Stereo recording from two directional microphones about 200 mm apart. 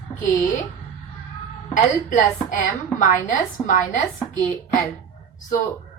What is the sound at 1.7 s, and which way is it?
A woman's voice, 40° left (ahead or behind).